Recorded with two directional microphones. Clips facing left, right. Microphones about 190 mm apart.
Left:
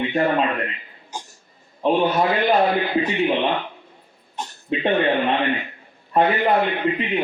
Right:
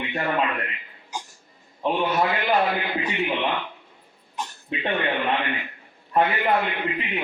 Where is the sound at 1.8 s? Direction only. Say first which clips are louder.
Left 4 dB; 30° left (ahead or behind).